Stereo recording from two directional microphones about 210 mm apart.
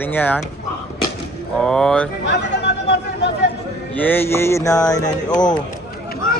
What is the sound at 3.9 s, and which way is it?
Speech, 10° left (ahead or behind).